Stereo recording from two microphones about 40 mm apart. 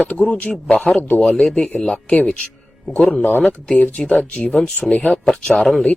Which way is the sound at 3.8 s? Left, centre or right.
Left.